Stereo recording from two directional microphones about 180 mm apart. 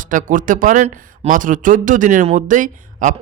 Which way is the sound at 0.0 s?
45° right (ahead or behind).